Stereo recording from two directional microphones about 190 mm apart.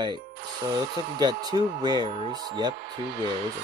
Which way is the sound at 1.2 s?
20° right (ahead or behind).